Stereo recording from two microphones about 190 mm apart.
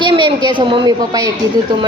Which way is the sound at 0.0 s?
25° right (ahead or behind).